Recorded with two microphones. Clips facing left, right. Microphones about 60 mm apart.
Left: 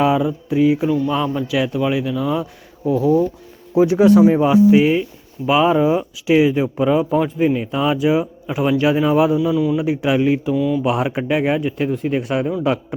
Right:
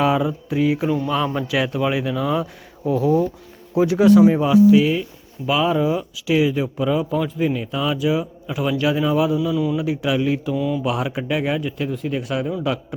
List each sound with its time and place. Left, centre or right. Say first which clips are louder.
0.0 s speech: left 2 dB; centre
3.8 s a man's voice: left 1 dB; left
4.2 s speech: left 1 dB; centre
4.4 s a man's voice: left 1 dB; left